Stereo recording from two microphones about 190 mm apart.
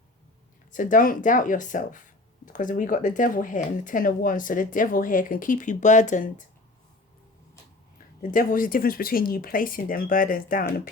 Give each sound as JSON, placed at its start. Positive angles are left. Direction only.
{"t": 0.7, "sound": "speech", "side_deg": 45}
{"t": 8.2, "sound": "speech", "side_deg": 45}